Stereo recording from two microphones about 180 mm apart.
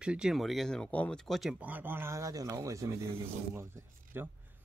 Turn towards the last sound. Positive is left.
turn(degrees=-15)  # may be behind; listen again after turning